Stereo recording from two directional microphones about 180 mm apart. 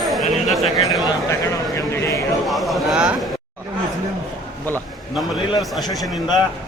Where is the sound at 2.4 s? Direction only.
Centre (ahead or behind).